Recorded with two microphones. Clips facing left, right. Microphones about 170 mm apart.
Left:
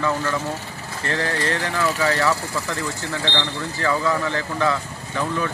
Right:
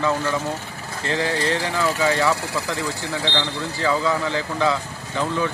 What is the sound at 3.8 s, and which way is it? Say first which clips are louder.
Speech: even; 15° right (ahead or behind).